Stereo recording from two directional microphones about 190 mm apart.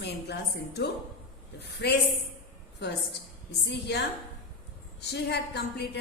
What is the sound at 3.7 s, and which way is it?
Speech, 60° left (ahead or behind).